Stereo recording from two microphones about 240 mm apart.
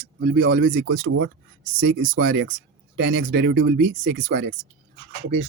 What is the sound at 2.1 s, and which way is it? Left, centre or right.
Speech, right.